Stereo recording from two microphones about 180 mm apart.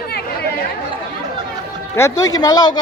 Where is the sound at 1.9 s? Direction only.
15° left (ahead or behind).